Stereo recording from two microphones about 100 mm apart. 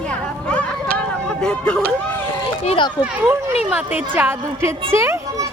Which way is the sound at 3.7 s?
15° right (ahead or behind).